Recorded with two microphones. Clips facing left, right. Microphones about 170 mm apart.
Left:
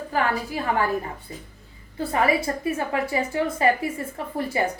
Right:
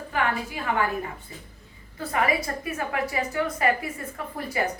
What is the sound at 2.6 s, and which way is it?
A woman's voice, 30° left (ahead or behind).